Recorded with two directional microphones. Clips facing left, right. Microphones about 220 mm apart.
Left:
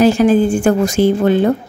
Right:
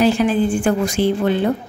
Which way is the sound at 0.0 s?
45° left (ahead or behind).